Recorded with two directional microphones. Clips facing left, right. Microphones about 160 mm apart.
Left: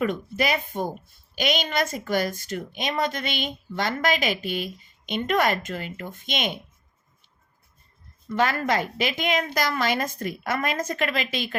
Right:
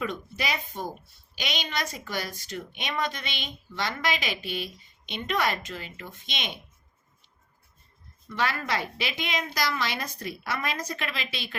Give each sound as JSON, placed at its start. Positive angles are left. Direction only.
{"t": 0.0, "sound": "a woman's voice", "side_deg": 50}
{"t": 8.4, "sound": "a woman's voice", "side_deg": 45}